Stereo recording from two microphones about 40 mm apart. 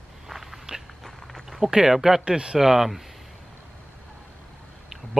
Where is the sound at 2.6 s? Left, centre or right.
Centre.